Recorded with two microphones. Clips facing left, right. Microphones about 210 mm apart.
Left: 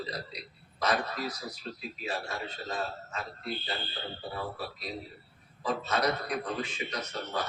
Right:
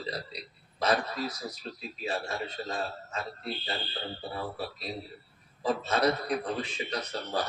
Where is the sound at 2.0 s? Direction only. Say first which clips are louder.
Right 3 dB; 30° right (ahead or behind).